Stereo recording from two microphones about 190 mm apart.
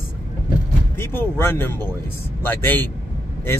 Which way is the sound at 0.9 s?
10° left (ahead or behind).